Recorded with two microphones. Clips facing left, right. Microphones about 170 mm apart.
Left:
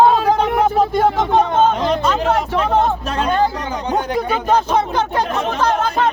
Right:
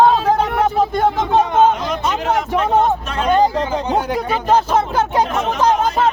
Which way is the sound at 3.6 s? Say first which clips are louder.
Right 5 dB; 30° right (ahead or behind).